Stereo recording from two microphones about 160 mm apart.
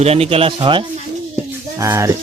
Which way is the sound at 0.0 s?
40° right (ahead or behind).